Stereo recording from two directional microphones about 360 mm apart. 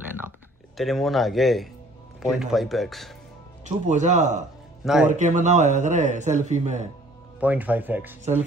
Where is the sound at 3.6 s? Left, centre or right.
Centre.